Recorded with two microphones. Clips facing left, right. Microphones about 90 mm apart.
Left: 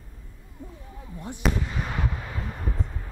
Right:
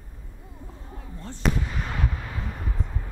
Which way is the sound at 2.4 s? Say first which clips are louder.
Left 3 dB; centre (ahead or behind).